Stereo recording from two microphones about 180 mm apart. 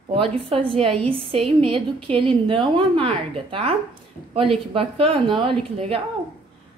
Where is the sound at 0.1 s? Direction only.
30° right (ahead or behind).